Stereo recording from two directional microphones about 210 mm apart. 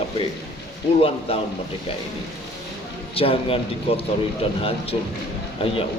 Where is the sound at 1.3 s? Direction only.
25° left (ahead or behind).